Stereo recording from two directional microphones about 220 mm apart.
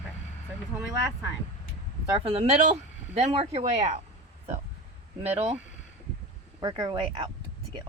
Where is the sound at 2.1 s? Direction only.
25° right (ahead or behind).